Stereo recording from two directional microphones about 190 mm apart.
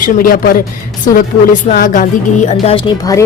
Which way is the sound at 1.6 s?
45° left (ahead or behind).